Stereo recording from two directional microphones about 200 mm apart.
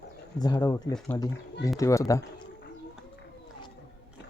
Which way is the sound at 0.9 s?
Centre (ahead or behind).